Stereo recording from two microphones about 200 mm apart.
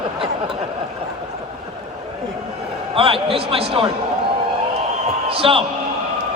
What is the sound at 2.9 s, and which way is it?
Speech, 25° right (ahead or behind).